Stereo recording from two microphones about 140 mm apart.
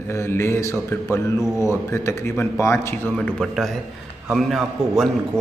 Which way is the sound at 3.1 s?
Centre (ahead or behind).